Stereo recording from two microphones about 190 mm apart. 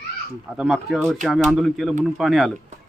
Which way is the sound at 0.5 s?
Centre (ahead or behind).